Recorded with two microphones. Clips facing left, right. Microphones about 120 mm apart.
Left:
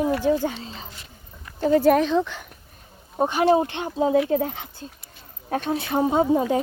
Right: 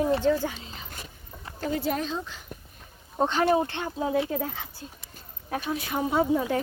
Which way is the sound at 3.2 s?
10° left (ahead or behind).